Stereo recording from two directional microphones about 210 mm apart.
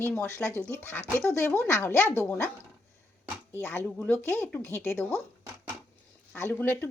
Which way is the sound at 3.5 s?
10° left (ahead or behind).